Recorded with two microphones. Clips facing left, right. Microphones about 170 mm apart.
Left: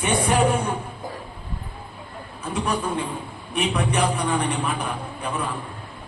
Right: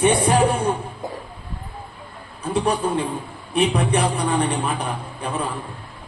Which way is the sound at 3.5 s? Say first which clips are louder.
Right 4 dB; 30° right (ahead or behind).